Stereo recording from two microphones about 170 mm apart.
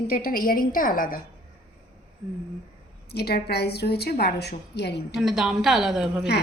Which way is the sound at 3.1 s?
70° left (ahead or behind).